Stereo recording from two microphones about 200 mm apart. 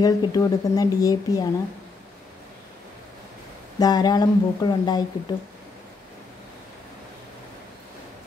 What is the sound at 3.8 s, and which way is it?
Speech, 20° left (ahead or behind).